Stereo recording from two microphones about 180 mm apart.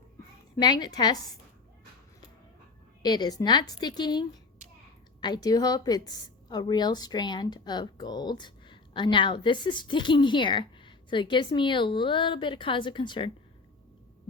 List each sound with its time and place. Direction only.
0.5 s a woman's voice: 25° left (ahead or behind)
3.0 s a woman's voice: 25° left (ahead or behind)